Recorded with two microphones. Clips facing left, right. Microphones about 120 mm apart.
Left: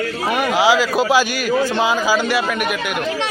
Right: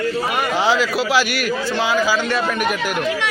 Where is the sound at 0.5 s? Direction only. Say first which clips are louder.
Left 3 dB; 10° left (ahead or behind).